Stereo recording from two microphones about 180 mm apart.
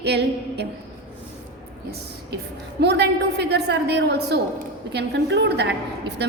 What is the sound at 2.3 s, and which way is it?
A woman's voice, 65° right (ahead or behind).